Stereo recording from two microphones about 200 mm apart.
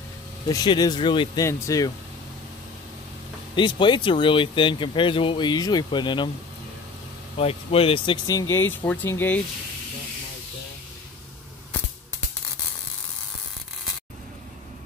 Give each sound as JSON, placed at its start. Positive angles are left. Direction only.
{"t": 0.5, "sound": "speech", "side_deg": 20}
{"t": 3.5, "sound": "speech", "side_deg": 25}
{"t": 7.3, "sound": "speech", "side_deg": 30}